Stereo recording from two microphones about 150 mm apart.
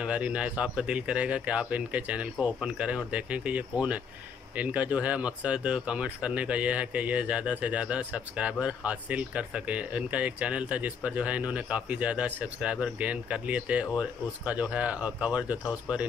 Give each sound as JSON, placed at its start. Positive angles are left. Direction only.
{"t": 0.0, "sound": "speech", "side_deg": -10}